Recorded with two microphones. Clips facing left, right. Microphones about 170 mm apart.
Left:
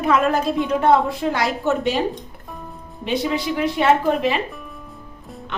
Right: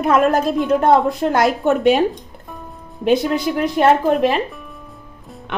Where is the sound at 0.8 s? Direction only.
45° right (ahead or behind).